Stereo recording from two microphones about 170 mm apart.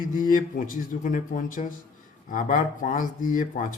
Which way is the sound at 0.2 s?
55° left (ahead or behind).